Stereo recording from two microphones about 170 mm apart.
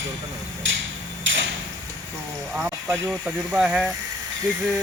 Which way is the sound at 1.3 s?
90° right.